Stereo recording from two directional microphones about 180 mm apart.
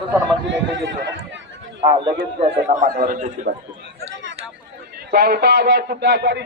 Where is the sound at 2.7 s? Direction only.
50° right (ahead or behind).